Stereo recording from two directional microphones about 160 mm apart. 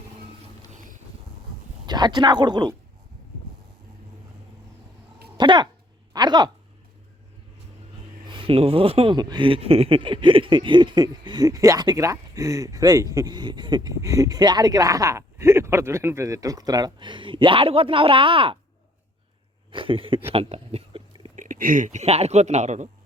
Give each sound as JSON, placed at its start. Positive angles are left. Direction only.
{"t": 0.7, "sound": "vehicle", "side_deg": -55}
{"t": 1.9, "sound": "speech", "side_deg": -25}
{"t": 5.4, "sound": "speech", "side_deg": -30}
{"t": 8.3, "sound": "speech", "side_deg": -35}
{"t": 19.7, "sound": "speech", "side_deg": -35}
{"t": 20.3, "sound": "a sound", "side_deg": -35}
{"t": 21.3, "sound": "speech", "side_deg": -55}